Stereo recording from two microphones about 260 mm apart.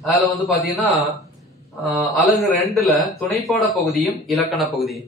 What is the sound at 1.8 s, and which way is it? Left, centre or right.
A man's voice, centre.